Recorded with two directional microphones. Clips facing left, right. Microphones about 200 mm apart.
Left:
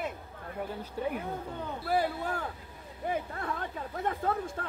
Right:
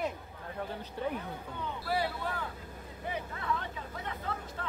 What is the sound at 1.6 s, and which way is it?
Speech, 45° left (ahead or behind).